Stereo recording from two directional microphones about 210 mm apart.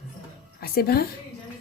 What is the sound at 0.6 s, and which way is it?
Speech, 45° left (ahead or behind).